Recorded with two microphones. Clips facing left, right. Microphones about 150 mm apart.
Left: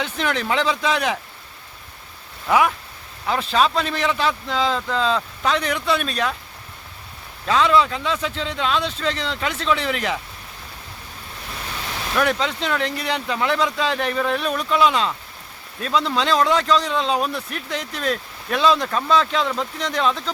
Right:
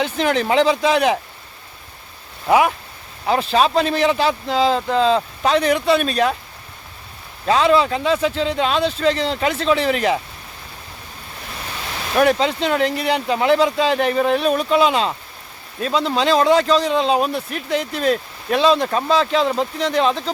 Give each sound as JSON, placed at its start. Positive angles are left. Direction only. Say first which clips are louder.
{"t": 0.0, "sound": "speech", "louder": "right 5 dB", "side_deg": -35}
{"t": 2.5, "sound": "speech", "louder": "right 3 dB", "side_deg": -25}
{"t": 7.4, "sound": "speech", "louder": "right 2 dB", "side_deg": -35}
{"t": 12.1, "sound": "speech", "louder": "right 6 dB", "side_deg": -30}